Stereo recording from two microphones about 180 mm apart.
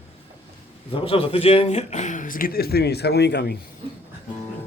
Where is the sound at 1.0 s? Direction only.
30° left (ahead or behind); by 3.6 s 65° left (ahead or behind).